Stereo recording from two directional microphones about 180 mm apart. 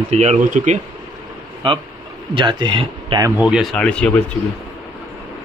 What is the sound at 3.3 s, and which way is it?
Speech, 5° right (ahead or behind).